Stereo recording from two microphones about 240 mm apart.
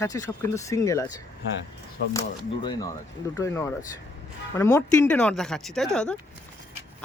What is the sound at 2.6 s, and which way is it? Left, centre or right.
Speech, centre.